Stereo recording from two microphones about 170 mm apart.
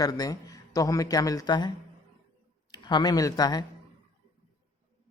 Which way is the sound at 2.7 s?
25° left (ahead or behind).